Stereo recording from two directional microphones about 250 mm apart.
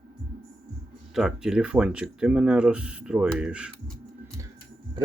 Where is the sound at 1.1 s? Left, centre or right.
Centre.